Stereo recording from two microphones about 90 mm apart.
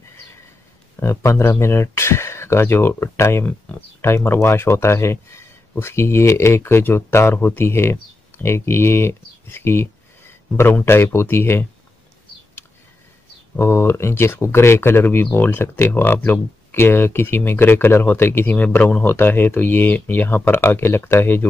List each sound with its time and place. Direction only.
0.9 s speech: 30° left (ahead or behind)
13.6 s speech: 30° left (ahead or behind)